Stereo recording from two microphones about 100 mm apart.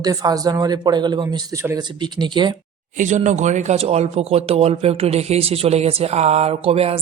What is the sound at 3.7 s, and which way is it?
Speech, 90° right.